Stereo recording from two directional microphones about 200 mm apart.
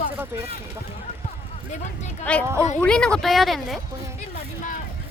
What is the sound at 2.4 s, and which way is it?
Speech, 15° right (ahead or behind).